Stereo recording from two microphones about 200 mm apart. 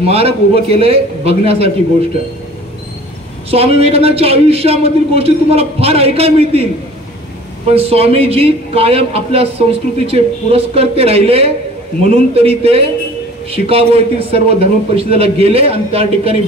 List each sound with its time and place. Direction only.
0.0 s a man's voice: 30° right (ahead or behind)
3.4 s a man's voice: 30° right (ahead or behind)
7.7 s a man's voice: 30° right (ahead or behind)